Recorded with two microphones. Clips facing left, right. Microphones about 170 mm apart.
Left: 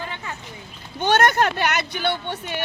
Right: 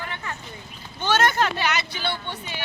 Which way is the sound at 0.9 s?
55° left (ahead or behind).